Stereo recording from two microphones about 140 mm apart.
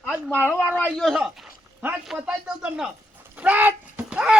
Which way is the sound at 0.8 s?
Centre (ahead or behind).